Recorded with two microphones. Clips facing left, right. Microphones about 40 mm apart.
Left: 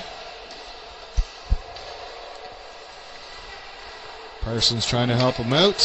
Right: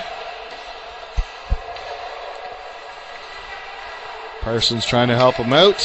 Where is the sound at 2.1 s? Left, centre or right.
Right.